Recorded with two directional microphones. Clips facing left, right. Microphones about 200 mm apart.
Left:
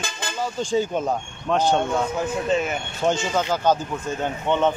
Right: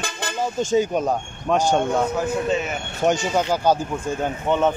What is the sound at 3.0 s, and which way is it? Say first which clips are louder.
Speech: right 2 dB; 15° right (ahead or behind).